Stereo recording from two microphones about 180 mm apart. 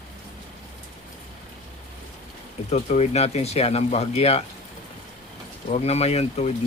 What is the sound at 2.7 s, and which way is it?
Speech, 35° left (ahead or behind).